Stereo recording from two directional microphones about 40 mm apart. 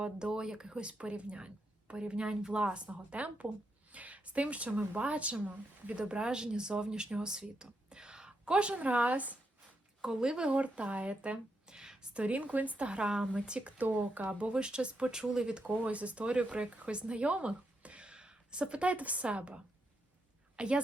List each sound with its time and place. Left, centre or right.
0.0 s a woman's voice: right
6.0 s speech: right
10.0 s speech: centre
10.4 s a woman's voice: right
11.6 s a sound: centre
12.1 s a woman's voice: right; by 15.6 s centre
15.6 s a woman's voice: right